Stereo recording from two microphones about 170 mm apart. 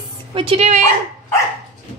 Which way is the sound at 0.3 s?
35° right (ahead or behind).